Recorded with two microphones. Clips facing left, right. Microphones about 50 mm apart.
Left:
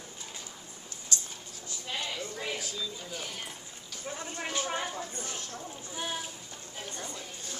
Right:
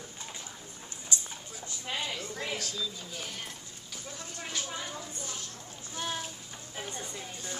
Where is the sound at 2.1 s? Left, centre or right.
Centre.